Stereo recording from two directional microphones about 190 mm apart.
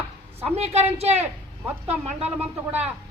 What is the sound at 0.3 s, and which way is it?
Speech, 35° right (ahead or behind).